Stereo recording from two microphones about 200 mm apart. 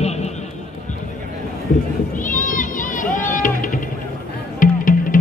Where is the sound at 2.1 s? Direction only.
40° left (ahead or behind).